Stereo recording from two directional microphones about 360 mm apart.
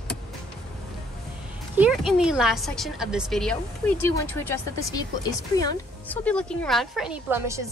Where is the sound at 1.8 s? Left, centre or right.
Centre.